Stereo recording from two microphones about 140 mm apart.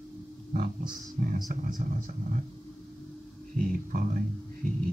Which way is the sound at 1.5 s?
70° right (ahead or behind).